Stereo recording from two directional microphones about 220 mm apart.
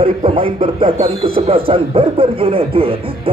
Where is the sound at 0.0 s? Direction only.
25° right (ahead or behind).